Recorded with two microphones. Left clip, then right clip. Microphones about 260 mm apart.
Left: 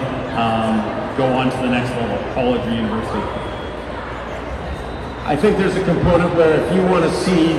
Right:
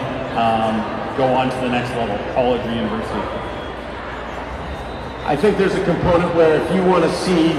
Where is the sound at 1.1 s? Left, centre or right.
Right.